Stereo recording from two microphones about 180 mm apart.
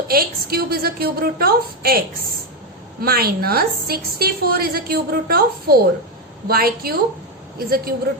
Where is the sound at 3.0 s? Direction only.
55° right (ahead or behind).